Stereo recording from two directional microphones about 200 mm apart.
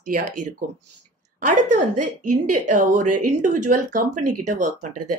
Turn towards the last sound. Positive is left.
turn(degrees=-40)  # may be behind; listen again after turning